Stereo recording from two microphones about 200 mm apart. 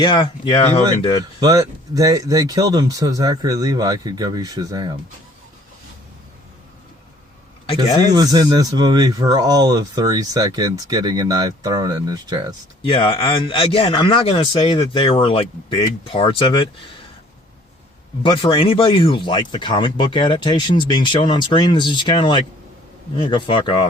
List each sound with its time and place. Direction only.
0.0 s speech: 25° left (ahead or behind)
0.8 s speech: 15° right (ahead or behind)
8.1 s speech: 20° right (ahead or behind)
12.8 s speech: 25° left (ahead or behind)
18.2 s speech: 25° left (ahead or behind)